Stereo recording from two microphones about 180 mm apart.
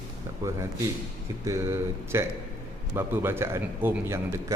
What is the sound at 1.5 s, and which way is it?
A man's voice, 15° right (ahead or behind).